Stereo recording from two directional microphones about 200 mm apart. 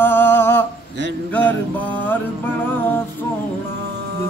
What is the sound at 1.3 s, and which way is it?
Music, 10° left (ahead or behind).